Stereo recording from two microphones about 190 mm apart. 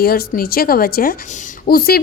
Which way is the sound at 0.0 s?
55° left (ahead or behind).